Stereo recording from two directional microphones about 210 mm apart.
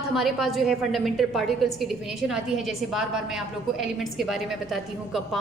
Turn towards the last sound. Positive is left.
turn(degrees=0)  # may be behind; listen again after turning